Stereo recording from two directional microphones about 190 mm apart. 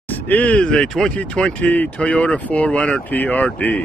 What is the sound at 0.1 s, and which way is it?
Speech, 10° left (ahead or behind).